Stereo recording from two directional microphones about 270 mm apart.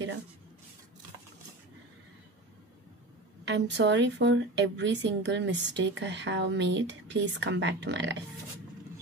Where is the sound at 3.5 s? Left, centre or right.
Right.